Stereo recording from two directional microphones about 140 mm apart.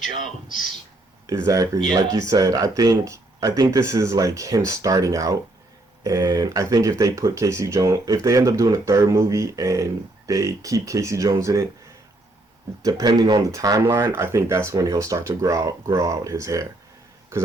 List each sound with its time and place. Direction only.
1.3 s speech: 25° right (ahead or behind)
12.8 s speech: 30° right (ahead or behind)